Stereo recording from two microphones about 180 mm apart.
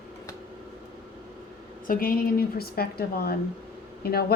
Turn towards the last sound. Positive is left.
turn(degrees=60)  # may be behind; listen again after turning